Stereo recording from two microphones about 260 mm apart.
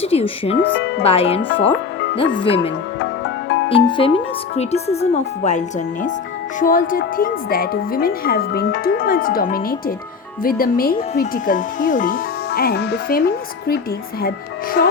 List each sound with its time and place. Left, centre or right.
0.0 s speech: left
0.6 s speech: left
1.0 s speech: left
3.0 s music: left
3.7 s speech: centre; by 14.8 s left